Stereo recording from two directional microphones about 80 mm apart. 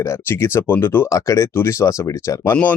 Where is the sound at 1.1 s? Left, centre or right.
Left.